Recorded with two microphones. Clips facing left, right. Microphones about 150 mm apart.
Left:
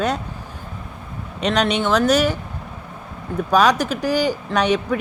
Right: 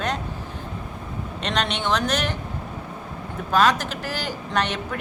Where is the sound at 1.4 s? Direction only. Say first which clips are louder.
Left 7 dB; 10° left (ahead or behind).